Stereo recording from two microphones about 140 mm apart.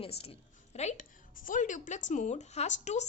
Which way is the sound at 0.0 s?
45° left (ahead or behind).